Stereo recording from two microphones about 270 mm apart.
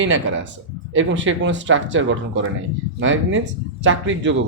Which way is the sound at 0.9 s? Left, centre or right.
Right.